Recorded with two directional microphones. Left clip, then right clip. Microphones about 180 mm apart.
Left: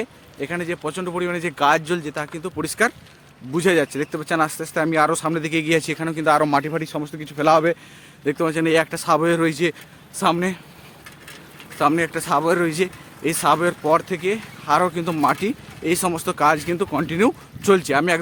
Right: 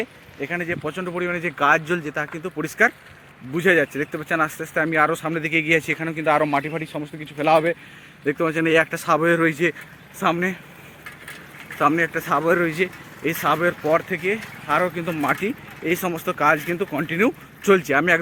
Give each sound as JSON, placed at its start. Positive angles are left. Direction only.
{"t": 0.0, "sound": "a man's voice", "side_deg": 15}
{"t": 3.5, "sound": "speech", "side_deg": 30}
{"t": 3.9, "sound": "a man's voice", "side_deg": 15}
{"t": 4.6, "sound": "speech", "side_deg": 30}
{"t": 8.2, "sound": "a man's voice", "side_deg": 15}
{"t": 11.8, "sound": "a man's voice", "side_deg": 15}
{"t": 12.6, "sound": "speech", "side_deg": 30}
{"t": 15.9, "sound": "a man's voice", "side_deg": 20}